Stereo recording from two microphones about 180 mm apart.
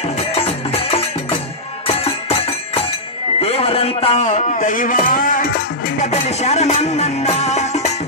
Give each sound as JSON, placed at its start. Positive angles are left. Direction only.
{"t": 0.3, "sound": "music", "side_deg": 35}
{"t": 3.3, "sound": "a sound", "side_deg": 35}
{"t": 6.0, "sound": "music", "side_deg": 40}